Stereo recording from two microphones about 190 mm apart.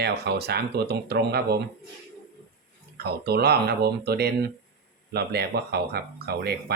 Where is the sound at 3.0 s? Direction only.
55° right (ahead or behind).